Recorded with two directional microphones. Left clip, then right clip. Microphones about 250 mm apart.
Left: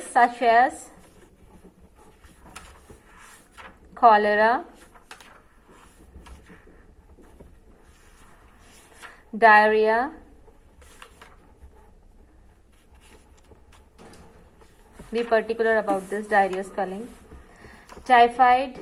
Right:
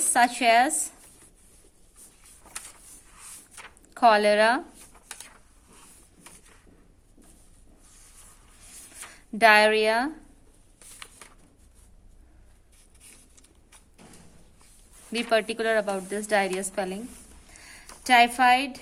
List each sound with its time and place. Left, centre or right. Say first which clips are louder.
0.1 s a woman's voice: left 2 dB; right
3.9 s a woman's voice: left 2 dB; right
9.4 s a woman's voice: left 2 dB; right
15.1 s a woman's voice: left 2 dB; right
18.1 s a woman's voice: left 2 dB; right